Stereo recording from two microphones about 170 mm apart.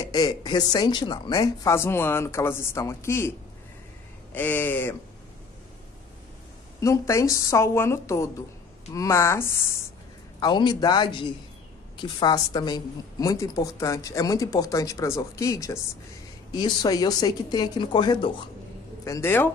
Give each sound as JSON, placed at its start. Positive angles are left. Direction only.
{"t": 0.0, "sound": "a woman's voice", "side_deg": 20}
{"t": 6.8, "sound": "a woman's voice", "side_deg": 15}